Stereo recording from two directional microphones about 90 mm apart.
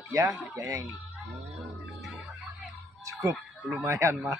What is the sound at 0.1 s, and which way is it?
Speech, 40° right (ahead or behind).